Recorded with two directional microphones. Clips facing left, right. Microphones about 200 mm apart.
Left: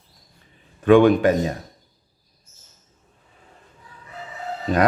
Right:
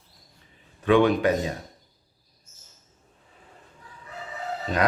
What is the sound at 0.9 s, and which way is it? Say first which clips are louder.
Speech: left 6 dB; 50° left (ahead or behind).